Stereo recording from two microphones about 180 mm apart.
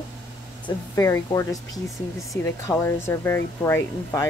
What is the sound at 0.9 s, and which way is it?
Speech, 15° left (ahead or behind).